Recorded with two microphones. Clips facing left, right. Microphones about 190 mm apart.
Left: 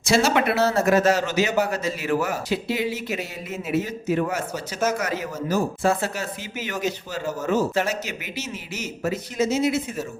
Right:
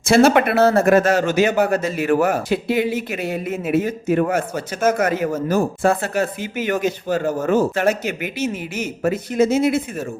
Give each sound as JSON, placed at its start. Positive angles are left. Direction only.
{"t": 0.0, "sound": "a man's voice", "side_deg": -55}